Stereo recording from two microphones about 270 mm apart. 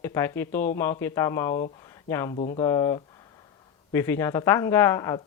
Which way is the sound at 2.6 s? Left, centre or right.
Centre.